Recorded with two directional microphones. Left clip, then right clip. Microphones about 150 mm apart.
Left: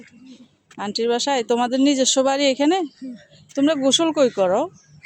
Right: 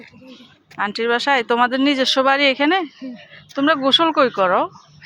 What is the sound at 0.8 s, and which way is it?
Speech, 35° left (ahead or behind).